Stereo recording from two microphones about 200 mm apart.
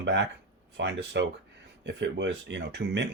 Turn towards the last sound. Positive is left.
turn(degrees=-60)  # may be behind; listen again after turning